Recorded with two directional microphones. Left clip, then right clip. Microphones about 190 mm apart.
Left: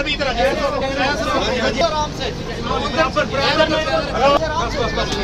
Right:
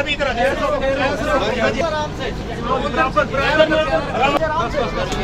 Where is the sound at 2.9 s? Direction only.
Centre (ahead or behind).